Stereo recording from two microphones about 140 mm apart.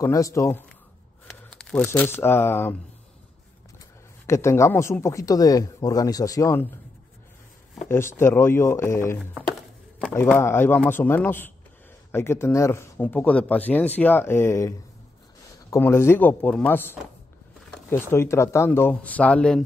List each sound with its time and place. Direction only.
0.0 s speech: 25° left (ahead or behind)
1.5 s tearing: 5° left (ahead or behind)
1.9 s speech: 15° left (ahead or behind)
4.3 s speech: 20° left (ahead or behind)
7.9 s speech: 20° left (ahead or behind)
10.2 s speech: 15° left (ahead or behind)
13.0 s speech: 10° left (ahead or behind)
15.7 s speech: 20° left (ahead or behind)